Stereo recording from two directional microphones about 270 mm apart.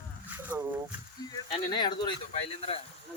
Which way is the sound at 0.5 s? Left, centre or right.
Centre.